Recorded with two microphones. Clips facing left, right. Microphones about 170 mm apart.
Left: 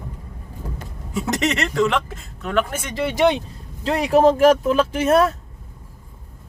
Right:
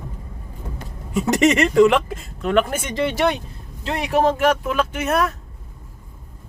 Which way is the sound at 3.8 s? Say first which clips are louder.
Left 4 dB; 35° left (ahead or behind).